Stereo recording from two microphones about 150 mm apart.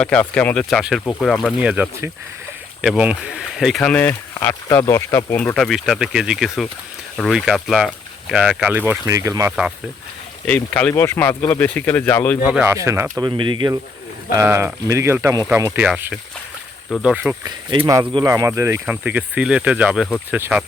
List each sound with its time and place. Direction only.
0.0 s speech: 10° left (ahead or behind)
1.6 s speech: 10° right (ahead or behind); by 5.4 s 20° left (ahead or behind)
5.4 s speech: 5° left (ahead or behind); by 9.5 s 20° right (ahead or behind)
10.4 s speech: 10° left (ahead or behind)
12.6 s speech: 20° right (ahead or behind)
13.2 s speech: 30° right (ahead or behind)
14.3 s speech: 15° right (ahead or behind)
17.4 s speech: 25° right (ahead or behind); by 20.7 s 5° right (ahead or behind)